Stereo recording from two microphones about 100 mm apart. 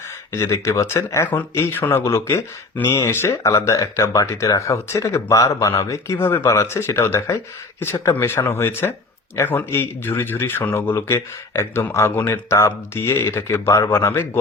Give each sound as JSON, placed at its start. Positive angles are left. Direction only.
{"t": 0.3, "sound": "speech", "side_deg": 25}